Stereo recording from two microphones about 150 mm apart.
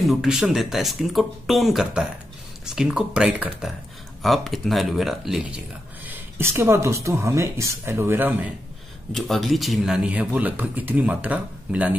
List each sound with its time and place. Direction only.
0.0 s speech: centre (ahead or behind)
6.0 s speech: 15° right (ahead or behind)
9.1 s speech: centre (ahead or behind)